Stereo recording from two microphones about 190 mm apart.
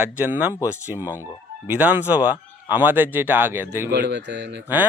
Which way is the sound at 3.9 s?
65° right (ahead or behind).